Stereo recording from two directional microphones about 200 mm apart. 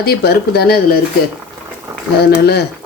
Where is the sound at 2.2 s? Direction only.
55° left (ahead or behind).